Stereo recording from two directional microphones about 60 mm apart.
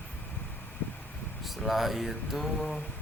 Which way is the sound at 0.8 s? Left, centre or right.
Left.